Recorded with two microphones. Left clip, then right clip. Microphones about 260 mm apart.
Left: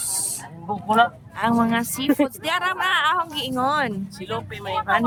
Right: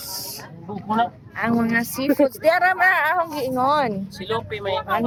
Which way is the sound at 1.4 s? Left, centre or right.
Centre.